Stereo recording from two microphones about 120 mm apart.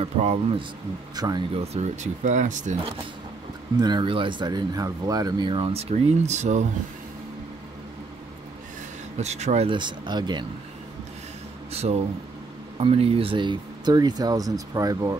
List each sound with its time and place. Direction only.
0.0 s speech: 55° right (ahead or behind)
1.1 s speech: 30° right (ahead or behind)
1.5 s speech: 60° right (ahead or behind); by 2.8 s 90° right
3.7 s speech: 35° right (ahead or behind); by 6.7 s 85° right
9.2 s speech: 70° right (ahead or behind)
9.7 s speech: 40° right (ahead or behind)
11.7 s speech: 60° right (ahead or behind); by 15.1 s 30° right (ahead or behind)